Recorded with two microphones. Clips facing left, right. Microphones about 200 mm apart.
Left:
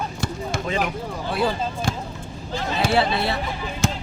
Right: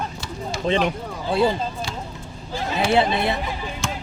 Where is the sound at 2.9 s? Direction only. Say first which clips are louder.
Right 2 dB; 20° right (ahead or behind).